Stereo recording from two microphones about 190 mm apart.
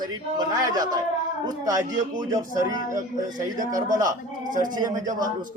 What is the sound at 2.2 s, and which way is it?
A man's voice, 20° right (ahead or behind).